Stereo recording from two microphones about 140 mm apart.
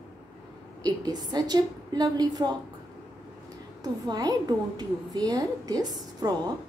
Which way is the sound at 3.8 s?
30° right (ahead or behind).